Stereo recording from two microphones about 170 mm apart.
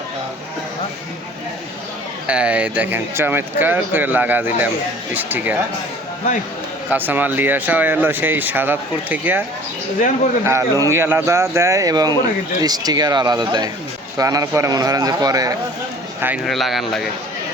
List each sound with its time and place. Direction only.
2.2 s speech: 5° right (ahead or behind)
6.9 s speech: 10° right (ahead or behind)
10.4 s speech: 15° right (ahead or behind)
16.2 s speech: 10° right (ahead or behind)